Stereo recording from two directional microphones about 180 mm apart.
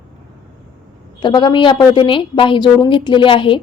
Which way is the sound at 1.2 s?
25° left (ahead or behind).